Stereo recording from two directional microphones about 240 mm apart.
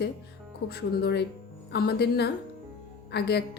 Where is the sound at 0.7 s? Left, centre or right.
Left.